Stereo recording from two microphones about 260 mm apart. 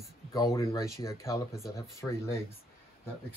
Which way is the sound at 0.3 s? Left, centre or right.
Centre.